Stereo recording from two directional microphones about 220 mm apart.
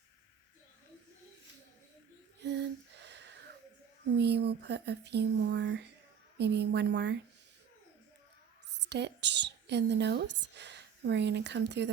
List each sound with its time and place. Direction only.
2.4 s a sound: 50° right (ahead or behind)
4.2 s speech: 50° right (ahead or behind)
8.8 s speech: 50° right (ahead or behind)